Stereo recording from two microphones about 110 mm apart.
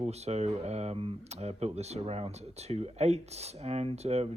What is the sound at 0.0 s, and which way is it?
Speech, 80° right.